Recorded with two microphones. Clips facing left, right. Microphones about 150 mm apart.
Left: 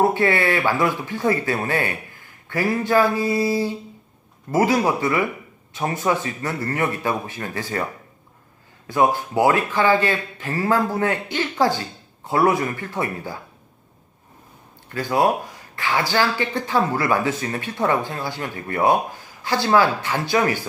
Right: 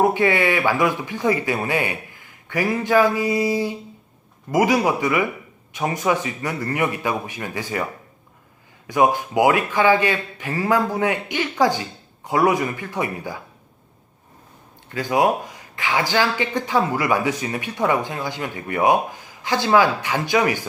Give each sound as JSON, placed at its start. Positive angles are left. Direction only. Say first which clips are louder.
{"t": 0.0, "sound": "speech", "louder": "right 1 dB", "side_deg": -20}
{"t": 8.9, "sound": "speech", "louder": "right 1 dB", "side_deg": -15}
{"t": 14.9, "sound": "speech", "louder": "even", "side_deg": -15}